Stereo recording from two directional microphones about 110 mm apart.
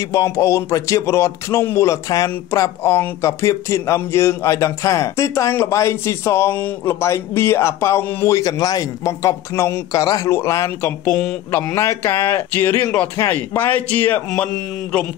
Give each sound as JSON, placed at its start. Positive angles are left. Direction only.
{"t": 0.1, "sound": "a man's voice", "side_deg": 25}